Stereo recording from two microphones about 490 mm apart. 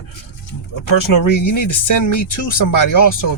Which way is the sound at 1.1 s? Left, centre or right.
Left.